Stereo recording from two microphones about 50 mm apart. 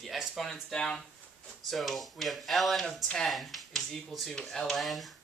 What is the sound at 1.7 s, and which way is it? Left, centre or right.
Speech, centre.